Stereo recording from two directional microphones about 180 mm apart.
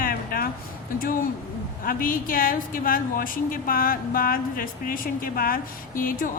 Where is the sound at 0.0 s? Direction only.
55° left (ahead or behind).